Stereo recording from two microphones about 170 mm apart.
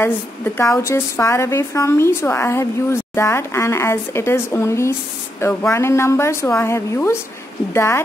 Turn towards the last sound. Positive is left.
turn(degrees=15)  # may be behind; listen again after turning